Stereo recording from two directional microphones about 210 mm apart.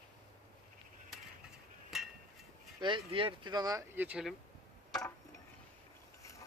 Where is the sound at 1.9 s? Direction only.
Centre (ahead or behind).